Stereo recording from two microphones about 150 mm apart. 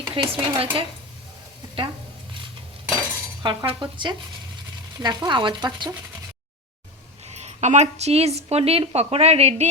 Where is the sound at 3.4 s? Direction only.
30° right (ahead or behind).